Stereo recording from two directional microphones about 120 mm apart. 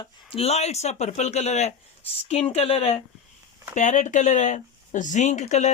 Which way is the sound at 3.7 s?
90° left.